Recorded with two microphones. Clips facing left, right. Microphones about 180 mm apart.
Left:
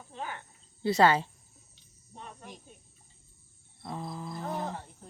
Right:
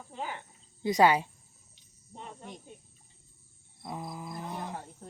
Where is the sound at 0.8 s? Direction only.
15° right (ahead or behind).